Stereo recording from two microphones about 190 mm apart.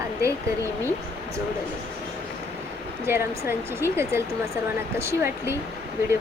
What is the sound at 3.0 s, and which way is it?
Speech, 15° right (ahead or behind).